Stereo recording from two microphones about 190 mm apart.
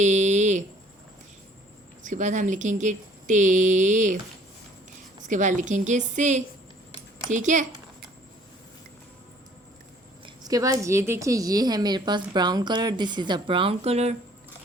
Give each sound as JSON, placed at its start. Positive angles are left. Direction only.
{"t": 0.0, "sound": "a sound", "side_deg": -40}
{"t": 2.0, "sound": "speech", "side_deg": -40}
{"t": 5.2, "sound": "speech", "side_deg": -40}
{"t": 10.2, "sound": "a woman's voice", "side_deg": -20}